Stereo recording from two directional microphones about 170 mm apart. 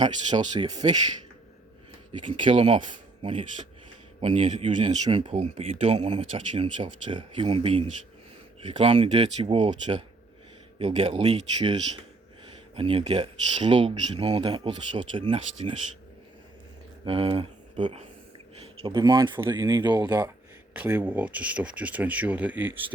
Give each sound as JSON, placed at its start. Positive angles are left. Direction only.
{"t": 0.0, "sound": "speech", "side_deg": -25}
{"t": 2.1, "sound": "speech", "side_deg": -30}
{"t": 4.2, "sound": "speech", "side_deg": -35}
{"t": 17.1, "sound": "speech", "side_deg": -30}
{"t": 17.7, "sound": "speech", "side_deg": -45}
{"t": 18.6, "sound": "speech", "side_deg": -30}
{"t": 20.0, "sound": "speech", "side_deg": -15}